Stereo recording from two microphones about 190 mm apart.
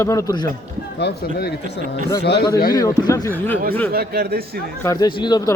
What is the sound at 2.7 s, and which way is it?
Speech, 20° left (ahead or behind).